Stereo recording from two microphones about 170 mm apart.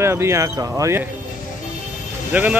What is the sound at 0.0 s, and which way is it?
Speech, 15° right (ahead or behind).